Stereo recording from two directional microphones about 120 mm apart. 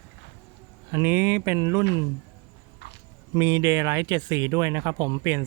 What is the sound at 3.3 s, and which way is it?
Speech, 30° right (ahead or behind).